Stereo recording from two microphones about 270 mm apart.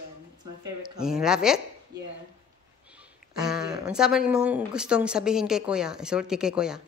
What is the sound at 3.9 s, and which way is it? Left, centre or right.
Speech, centre.